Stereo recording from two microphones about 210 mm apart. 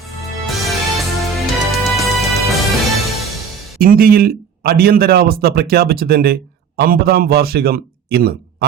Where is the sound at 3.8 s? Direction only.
45° right (ahead or behind).